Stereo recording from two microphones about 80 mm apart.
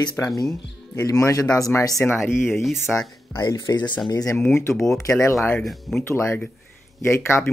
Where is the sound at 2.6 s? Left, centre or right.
Centre.